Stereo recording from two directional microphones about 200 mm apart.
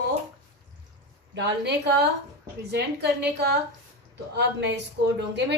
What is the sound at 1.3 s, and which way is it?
Speech, 60° right (ahead or behind).